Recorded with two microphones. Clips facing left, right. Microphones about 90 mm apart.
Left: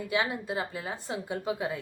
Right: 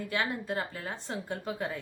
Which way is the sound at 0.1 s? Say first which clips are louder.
Left 3 dB; 10° left (ahead or behind).